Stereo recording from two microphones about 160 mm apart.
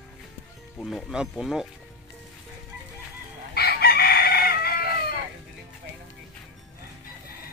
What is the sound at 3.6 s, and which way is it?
Chicken, 75° left (ahead or behind).